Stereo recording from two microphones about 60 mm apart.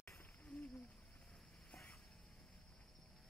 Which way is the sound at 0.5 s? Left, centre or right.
Left.